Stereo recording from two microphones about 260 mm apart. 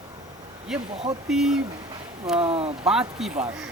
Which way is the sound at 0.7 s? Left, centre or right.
Centre.